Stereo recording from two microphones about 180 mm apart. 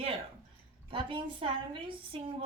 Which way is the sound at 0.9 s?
30° right (ahead or behind).